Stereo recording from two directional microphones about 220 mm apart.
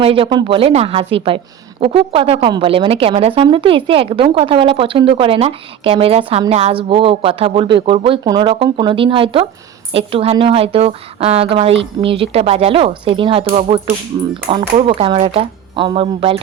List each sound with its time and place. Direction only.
0.0 s speech: 25° right (ahead or behind)
14.1 s speech: 15° right (ahead or behind)